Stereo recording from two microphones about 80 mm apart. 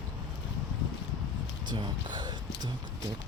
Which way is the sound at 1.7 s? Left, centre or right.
Right.